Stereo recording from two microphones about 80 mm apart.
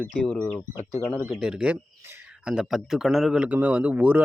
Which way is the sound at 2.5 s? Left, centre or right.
Centre.